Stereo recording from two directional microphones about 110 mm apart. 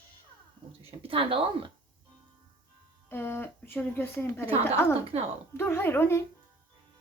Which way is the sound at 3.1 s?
20° left (ahead or behind).